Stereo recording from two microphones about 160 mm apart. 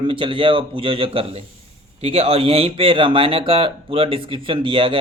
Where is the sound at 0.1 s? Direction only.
35° right (ahead or behind).